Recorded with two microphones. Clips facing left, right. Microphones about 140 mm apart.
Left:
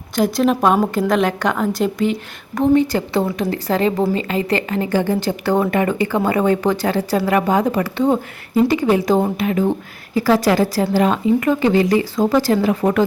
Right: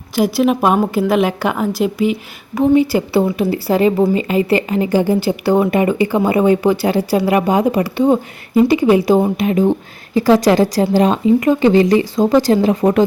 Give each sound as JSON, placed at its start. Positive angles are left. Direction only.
{"t": 0.2, "sound": "speech", "side_deg": -10}